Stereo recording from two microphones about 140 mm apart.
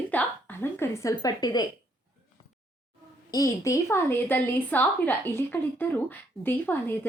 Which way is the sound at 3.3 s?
25° left (ahead or behind).